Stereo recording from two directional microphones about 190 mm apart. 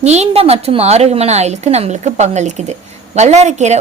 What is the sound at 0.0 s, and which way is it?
A woman's voice, 35° right (ahead or behind).